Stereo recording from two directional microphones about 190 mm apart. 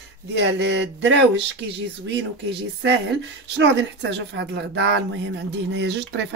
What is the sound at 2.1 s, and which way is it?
Speech, 65° right (ahead or behind).